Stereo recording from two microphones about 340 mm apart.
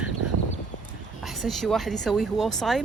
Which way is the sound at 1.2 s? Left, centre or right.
Centre.